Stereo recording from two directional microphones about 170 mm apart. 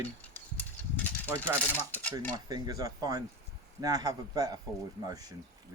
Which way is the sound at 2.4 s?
25° right (ahead or behind).